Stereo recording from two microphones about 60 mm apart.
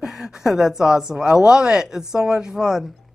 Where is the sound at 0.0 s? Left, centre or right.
Centre.